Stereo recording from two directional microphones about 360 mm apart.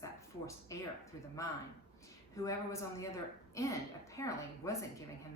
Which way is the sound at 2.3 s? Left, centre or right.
Centre.